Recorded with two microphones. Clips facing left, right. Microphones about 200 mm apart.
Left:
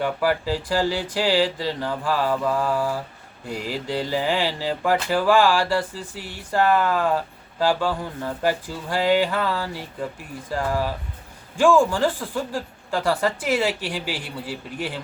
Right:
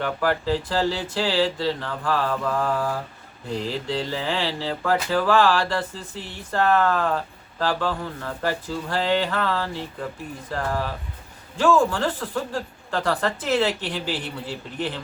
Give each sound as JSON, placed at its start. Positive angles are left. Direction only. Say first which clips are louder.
{"t": 0.0, "sound": "speech", "louder": "left 1 dB", "side_deg": 10}